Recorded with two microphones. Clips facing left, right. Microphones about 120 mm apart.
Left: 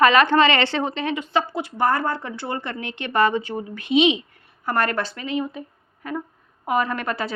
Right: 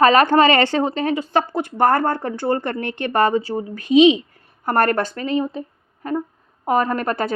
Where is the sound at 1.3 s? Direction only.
50° right (ahead or behind).